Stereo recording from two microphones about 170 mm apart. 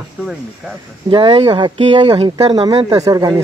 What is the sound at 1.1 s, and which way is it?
Speech, 30° right (ahead or behind).